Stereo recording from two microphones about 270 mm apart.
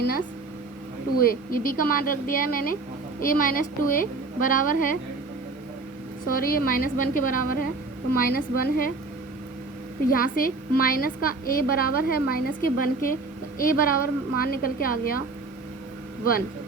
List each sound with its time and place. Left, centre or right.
1.1 s a woman's voice: left
6.2 s a woman's voice: left
10.1 s a woman's voice: left